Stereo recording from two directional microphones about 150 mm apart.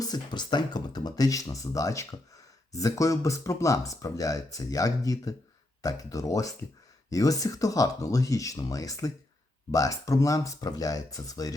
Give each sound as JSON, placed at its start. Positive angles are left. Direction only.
{"t": 0.0, "sound": "speech", "side_deg": 25}